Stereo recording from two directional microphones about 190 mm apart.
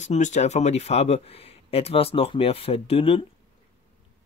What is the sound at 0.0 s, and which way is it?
Speech, 40° left (ahead or behind).